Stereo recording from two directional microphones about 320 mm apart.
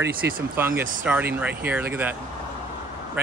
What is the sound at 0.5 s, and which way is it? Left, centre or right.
Speech, centre.